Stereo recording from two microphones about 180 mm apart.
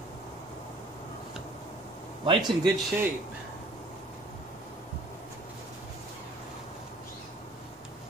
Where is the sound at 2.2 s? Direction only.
30° right (ahead or behind).